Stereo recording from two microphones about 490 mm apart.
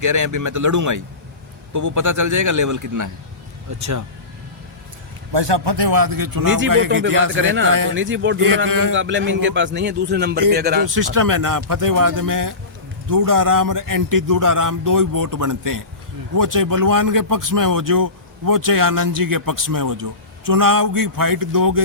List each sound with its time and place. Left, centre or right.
0.0 s a man's voice: right
5.3 s a man's voice: right
6.8 s a man's voice: right
7.1 s a man's voice: right
7.3 s a man's voice: right
10.8 s a man's voice: right